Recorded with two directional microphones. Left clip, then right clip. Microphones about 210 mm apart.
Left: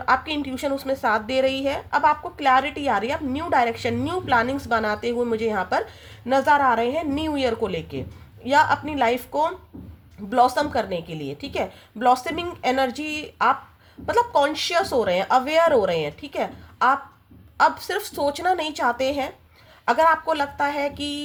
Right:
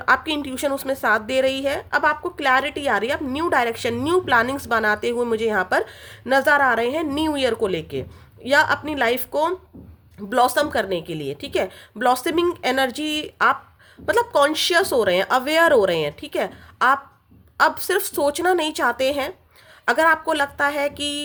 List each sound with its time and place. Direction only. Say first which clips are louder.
0.0 s a woman's voice: right 2 dB; 40° right (ahead or behind)